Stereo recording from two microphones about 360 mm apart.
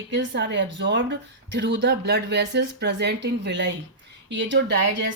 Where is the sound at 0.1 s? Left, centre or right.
Right.